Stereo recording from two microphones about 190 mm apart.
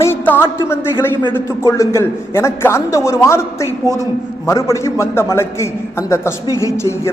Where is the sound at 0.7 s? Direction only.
10° left (ahead or behind).